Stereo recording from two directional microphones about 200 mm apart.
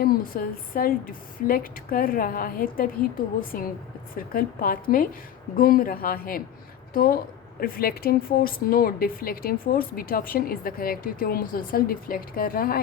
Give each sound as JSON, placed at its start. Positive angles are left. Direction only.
{"t": 0.0, "sound": "speech", "side_deg": 50}